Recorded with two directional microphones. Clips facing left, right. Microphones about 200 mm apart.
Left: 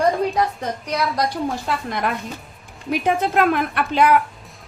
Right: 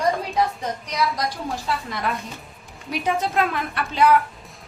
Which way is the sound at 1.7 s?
55° left (ahead or behind).